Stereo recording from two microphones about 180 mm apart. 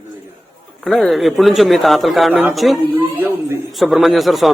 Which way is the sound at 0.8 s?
Centre (ahead or behind).